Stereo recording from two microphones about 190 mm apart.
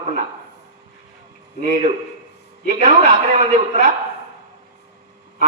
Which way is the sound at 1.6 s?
40° right (ahead or behind).